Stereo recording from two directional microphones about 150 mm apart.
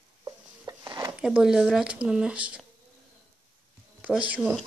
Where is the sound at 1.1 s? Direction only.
5° right (ahead or behind).